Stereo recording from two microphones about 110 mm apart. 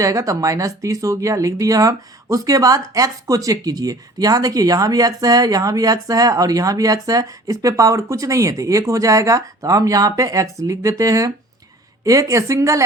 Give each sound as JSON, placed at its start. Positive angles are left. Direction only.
{"t": 0.0, "sound": "speech", "side_deg": -30}